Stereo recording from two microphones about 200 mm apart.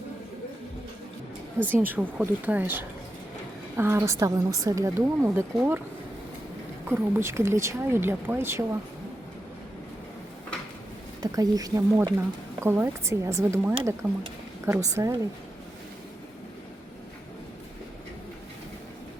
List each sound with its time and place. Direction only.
1.7 s speech: 10° right (ahead or behind)
6.8 s speech: 10° right (ahead or behind)
11.2 s speech: 20° right (ahead or behind)
14.7 s speech: 15° right (ahead or behind)